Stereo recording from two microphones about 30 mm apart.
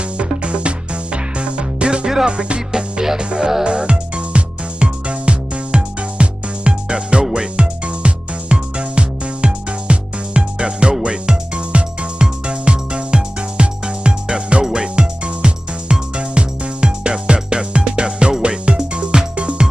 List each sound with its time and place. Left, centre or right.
0.2 s music: right
2.2 s speech: right
2.7 s music: right
3.6 s music: right